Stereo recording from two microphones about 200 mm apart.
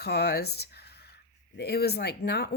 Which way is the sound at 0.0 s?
55° left (ahead or behind).